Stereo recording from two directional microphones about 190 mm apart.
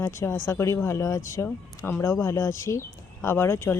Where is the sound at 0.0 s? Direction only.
15° left (ahead or behind).